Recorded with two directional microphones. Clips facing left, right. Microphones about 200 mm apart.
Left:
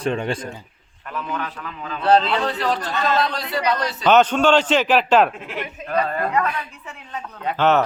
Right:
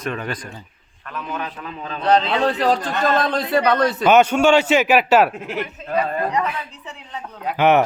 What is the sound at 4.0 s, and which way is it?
Speech, 10° right (ahead or behind).